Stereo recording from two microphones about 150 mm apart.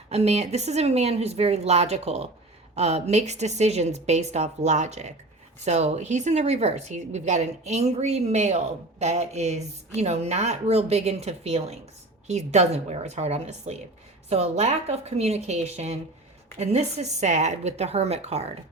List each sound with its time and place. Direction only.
0.1 s speech: 45° right (ahead or behind)